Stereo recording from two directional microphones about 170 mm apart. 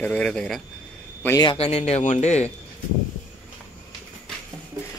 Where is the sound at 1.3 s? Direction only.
30° left (ahead or behind).